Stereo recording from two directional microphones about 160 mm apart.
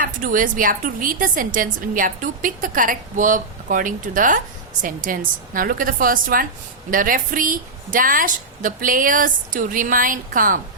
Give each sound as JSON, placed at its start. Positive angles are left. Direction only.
{"t": 0.0, "sound": "a woman's voice", "side_deg": -60}